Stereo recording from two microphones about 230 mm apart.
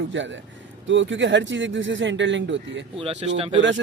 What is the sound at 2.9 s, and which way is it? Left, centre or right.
Speech, right.